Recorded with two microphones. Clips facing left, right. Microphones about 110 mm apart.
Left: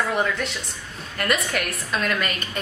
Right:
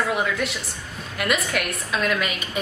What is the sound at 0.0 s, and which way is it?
A woman's voice, 5° right (ahead or behind).